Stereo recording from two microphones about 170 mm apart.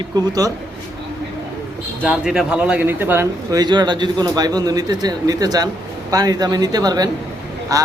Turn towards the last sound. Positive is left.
turn(degrees=-20)  # may be behind; listen again after turning